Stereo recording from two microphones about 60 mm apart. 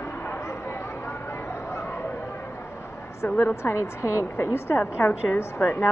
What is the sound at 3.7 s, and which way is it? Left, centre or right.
Speech, left.